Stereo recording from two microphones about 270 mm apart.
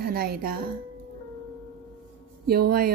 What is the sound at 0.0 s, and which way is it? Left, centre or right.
Speech, right.